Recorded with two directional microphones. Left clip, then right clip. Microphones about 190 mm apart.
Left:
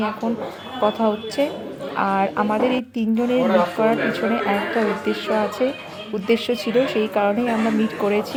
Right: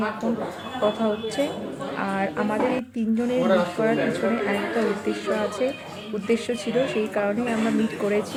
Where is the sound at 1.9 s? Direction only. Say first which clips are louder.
Left 7 dB; 20° left (ahead or behind).